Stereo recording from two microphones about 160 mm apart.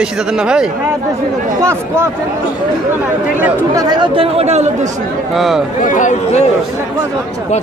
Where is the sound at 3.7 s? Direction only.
25° right (ahead or behind); by 4.7 s 45° right (ahead or behind).